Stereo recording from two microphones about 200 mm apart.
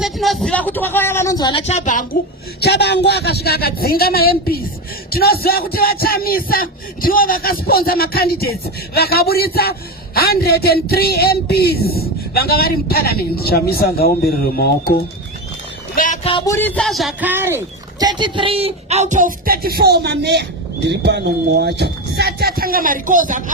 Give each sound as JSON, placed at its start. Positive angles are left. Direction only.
{"t": 0.0, "sound": "speech", "side_deg": 0}
{"t": 2.6, "sound": "speech", "side_deg": 55}
{"t": 16.5, "sound": "speech", "side_deg": 10}
{"t": 18.0, "sound": "speech", "side_deg": -20}